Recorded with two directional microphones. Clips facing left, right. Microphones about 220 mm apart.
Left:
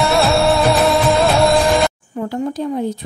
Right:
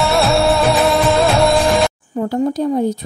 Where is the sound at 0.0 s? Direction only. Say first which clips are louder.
Even; centre (ahead or behind).